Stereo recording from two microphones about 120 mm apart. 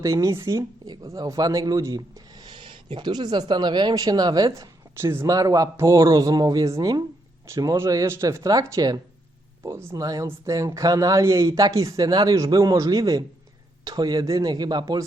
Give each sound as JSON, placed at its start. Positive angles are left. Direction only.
{"t": 0.0, "sound": "speech", "side_deg": -25}